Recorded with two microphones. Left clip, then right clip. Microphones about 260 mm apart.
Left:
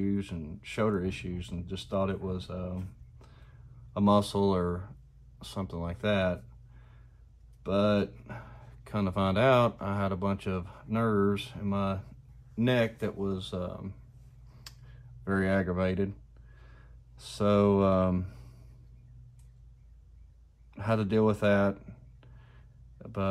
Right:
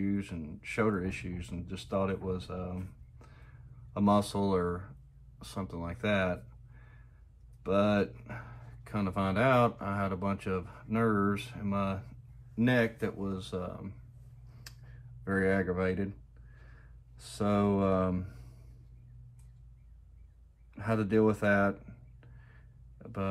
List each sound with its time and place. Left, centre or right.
0.0 s speech: centre
7.6 s speech: centre
15.2 s speech: centre
17.2 s speech: centre
20.7 s speech: centre
22.9 s a sound: centre